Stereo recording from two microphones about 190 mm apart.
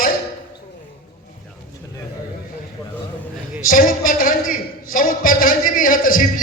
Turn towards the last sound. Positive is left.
turn(degrees=45)  # may be behind; listen again after turning